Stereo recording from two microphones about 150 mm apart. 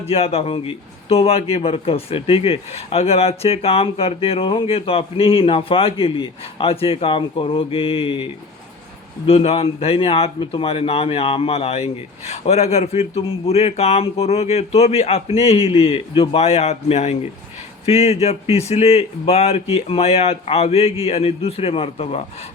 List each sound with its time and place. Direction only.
0.1 s a man's voice: 40° left (ahead or behind)